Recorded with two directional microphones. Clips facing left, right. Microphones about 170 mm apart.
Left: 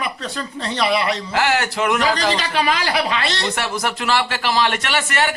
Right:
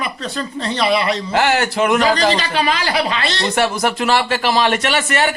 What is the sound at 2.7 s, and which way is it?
Speech, 10° left (ahead or behind).